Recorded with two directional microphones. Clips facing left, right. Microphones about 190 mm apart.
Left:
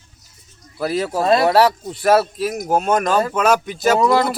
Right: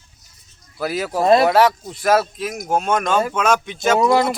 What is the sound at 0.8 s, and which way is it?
Speech, 5° right (ahead or behind).